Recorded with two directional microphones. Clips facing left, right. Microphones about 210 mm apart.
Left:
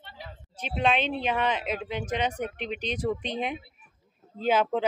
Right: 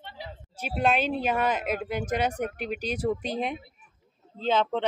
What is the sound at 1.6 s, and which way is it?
Speech, 45° right (ahead or behind).